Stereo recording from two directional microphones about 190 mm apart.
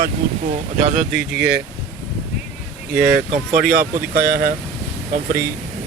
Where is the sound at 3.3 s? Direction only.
40° right (ahead or behind).